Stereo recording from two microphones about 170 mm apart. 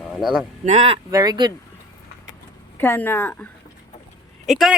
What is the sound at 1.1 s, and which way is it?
Speech, 20° right (ahead or behind).